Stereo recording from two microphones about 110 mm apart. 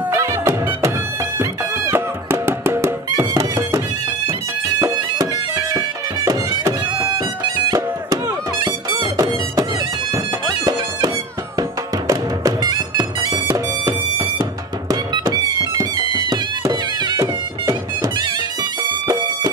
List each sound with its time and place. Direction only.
0.1 s music: 25° right (ahead or behind)
4.3 s bagpipes: 30° right (ahead or behind)
7.2 s music: 40° right (ahead or behind)
12.1 s music: 35° right (ahead or behind)